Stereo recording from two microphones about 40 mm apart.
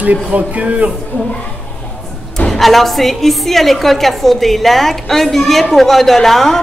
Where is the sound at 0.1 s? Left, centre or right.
Right.